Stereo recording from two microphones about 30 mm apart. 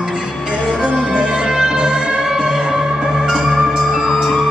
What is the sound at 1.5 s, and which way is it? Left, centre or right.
Music, centre.